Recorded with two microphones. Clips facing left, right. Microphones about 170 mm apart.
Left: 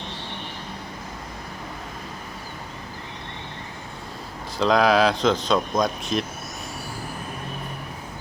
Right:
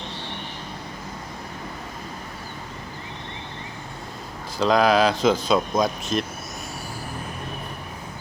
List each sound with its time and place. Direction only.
4.5 s speech: centre (ahead or behind)